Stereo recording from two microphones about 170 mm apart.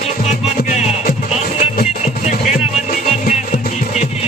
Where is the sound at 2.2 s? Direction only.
45° left (ahead or behind).